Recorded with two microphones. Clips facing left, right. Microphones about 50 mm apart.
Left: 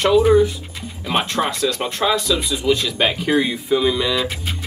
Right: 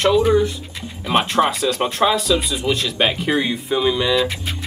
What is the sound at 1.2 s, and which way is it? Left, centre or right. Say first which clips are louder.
Speech: right 3 dB; centre.